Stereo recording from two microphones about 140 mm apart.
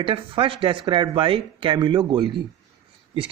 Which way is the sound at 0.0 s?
40° right (ahead or behind).